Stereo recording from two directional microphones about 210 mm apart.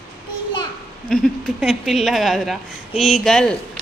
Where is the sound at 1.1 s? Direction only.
5° left (ahead or behind).